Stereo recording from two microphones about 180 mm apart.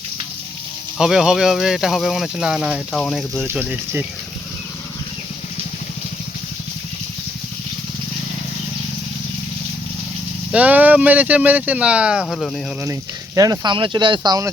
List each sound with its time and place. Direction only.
0.9 s speech: 5° right (ahead or behind)
10.5 s speech: 10° right (ahead or behind)
12.8 s speech: 15° right (ahead or behind)